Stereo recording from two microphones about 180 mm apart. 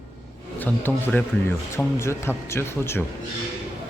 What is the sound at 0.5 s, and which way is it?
Speech, 10° left (ahead or behind).